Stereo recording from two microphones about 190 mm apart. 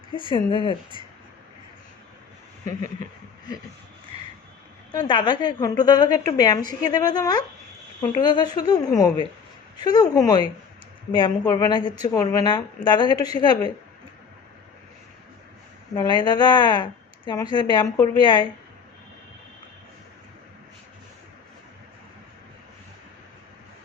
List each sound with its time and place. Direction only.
0.1 s a woman's voice: 25° left (ahead or behind)
4.9 s a woman's voice: 25° left (ahead or behind)
16.0 s a woman's voice: 25° left (ahead or behind)